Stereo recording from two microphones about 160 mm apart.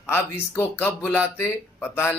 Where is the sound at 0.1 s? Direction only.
15° left (ahead or behind).